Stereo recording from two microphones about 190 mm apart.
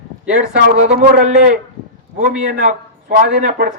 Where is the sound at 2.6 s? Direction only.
45° right (ahead or behind).